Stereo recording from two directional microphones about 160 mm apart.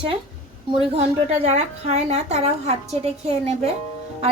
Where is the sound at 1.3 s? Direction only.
45° right (ahead or behind).